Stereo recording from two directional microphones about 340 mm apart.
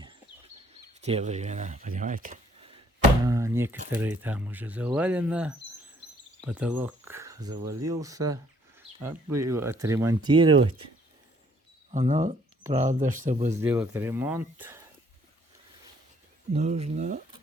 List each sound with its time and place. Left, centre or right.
1.0 s speech: centre
3.2 s a sound: centre
4.0 s speech: centre
11.9 s speech: centre
13.5 s speech: centre
16.5 s speech: centre